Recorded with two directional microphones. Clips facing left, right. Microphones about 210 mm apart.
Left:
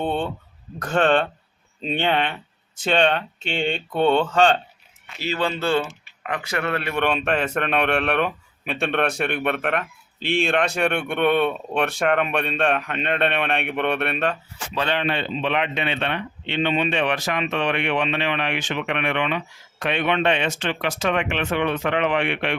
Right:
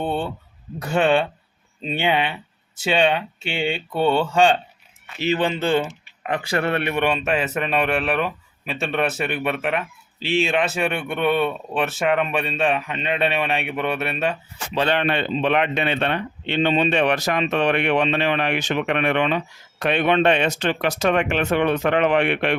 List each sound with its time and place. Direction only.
0.0 s a sound: 5° right (ahead or behind)
0.8 s speech: 10° right (ahead or behind)
6.3 s speech: 30° right (ahead or behind)
6.9 s a man's voice: 10° right (ahead or behind)
14.9 s speech: 55° right (ahead or behind)